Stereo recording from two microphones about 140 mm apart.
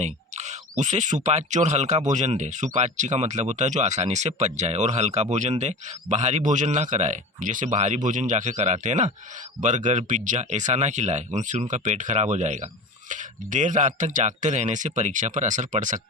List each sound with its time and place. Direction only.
0.0 s speech: 55° right (ahead or behind)